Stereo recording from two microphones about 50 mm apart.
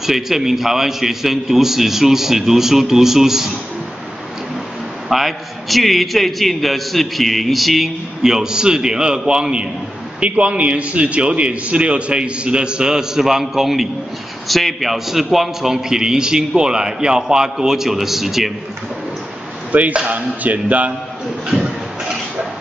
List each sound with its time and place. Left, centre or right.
0.0 s a man's voice: centre
5.1 s a man's voice: centre
19.7 s a man's voice: right
21.5 s a sound: centre